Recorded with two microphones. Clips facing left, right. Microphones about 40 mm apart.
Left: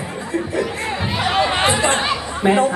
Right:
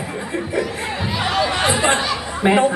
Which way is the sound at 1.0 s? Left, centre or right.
Centre.